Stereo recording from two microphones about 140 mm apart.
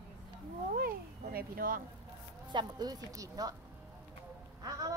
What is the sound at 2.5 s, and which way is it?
Speech, 30° right (ahead or behind).